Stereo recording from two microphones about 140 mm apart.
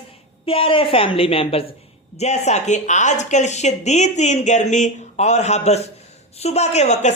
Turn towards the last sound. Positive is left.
turn(degrees=55)  # may be behind; listen again after turning